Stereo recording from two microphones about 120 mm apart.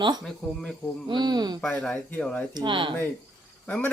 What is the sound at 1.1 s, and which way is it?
Speech, 35° right (ahead or behind).